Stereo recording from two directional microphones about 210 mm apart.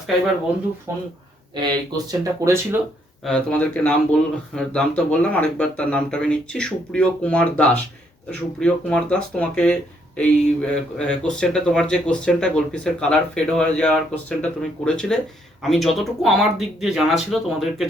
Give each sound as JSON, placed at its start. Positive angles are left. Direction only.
{"t": 0.9, "sound": "speech", "side_deg": -10}
{"t": 3.2, "sound": "speech", "side_deg": 5}